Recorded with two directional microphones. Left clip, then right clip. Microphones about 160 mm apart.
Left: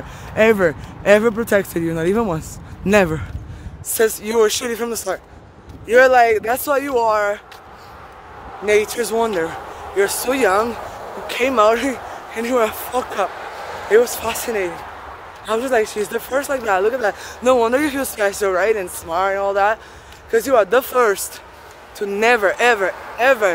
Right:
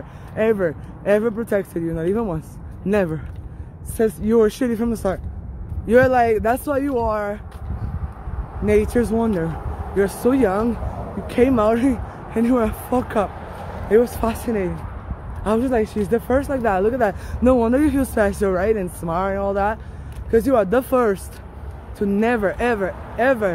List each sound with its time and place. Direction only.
0.4 s speech: 30° left (ahead or behind)
1.0 s speech: 20° left (ahead or behind)
4.4 s speech: 20° left (ahead or behind); by 6.5 s centre (ahead or behind)
6.5 s speech: 20° left (ahead or behind)
8.6 s speech: 10° left (ahead or behind)
9.0 s speech: 25° left (ahead or behind); by 20.8 s centre (ahead or behind)
20.9 s speech: 20° left (ahead or behind)